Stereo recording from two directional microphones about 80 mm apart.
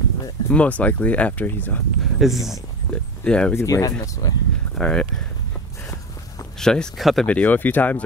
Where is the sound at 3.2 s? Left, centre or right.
Centre.